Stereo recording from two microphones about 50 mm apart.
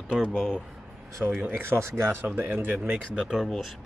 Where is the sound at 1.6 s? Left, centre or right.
Right.